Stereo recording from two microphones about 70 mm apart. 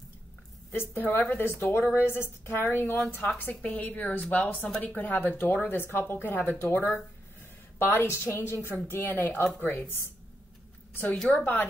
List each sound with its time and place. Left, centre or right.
0.7 s a woman's voice: left; by 4.9 s centre
4.9 s a woman's voice: left
11.2 s speech: left